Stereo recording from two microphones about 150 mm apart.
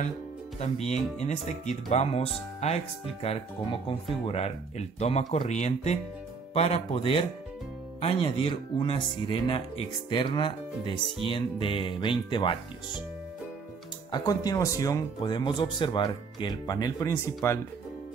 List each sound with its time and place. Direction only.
0.6 s speech: 45° left (ahead or behind)
14.1 s speech: 25° left (ahead or behind)